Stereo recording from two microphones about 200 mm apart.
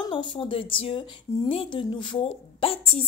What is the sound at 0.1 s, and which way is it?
Speech, 25° left (ahead or behind).